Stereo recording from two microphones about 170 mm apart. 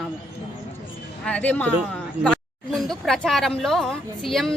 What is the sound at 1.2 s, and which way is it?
Speech, 10° left (ahead or behind).